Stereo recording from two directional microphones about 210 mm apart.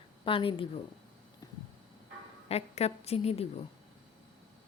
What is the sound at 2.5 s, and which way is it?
Speech, 30° left (ahead or behind).